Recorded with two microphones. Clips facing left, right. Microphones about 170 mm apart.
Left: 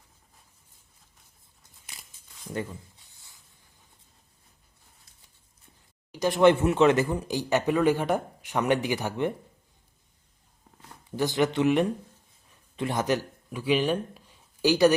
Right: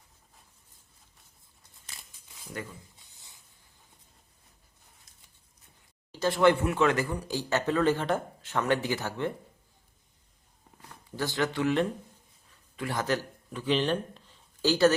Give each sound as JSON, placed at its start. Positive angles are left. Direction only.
{"t": 2.6, "sound": "speech", "side_deg": 25}
{"t": 3.1, "sound": "a sound", "side_deg": -20}
{"t": 6.1, "sound": "speech", "side_deg": 15}
{"t": 11.2, "sound": "speech", "side_deg": 20}